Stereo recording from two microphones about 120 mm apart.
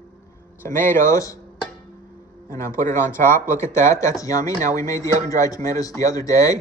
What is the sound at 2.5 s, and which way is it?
Speech, 25° left (ahead or behind).